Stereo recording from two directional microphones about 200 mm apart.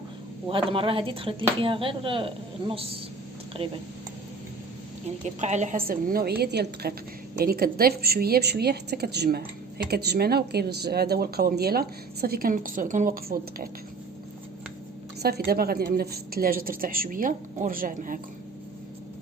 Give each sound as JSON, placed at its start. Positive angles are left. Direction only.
{"t": 0.4, "sound": "speech", "side_deg": -25}
{"t": 5.4, "sound": "speech", "side_deg": -35}
{"t": 15.2, "sound": "speech", "side_deg": -50}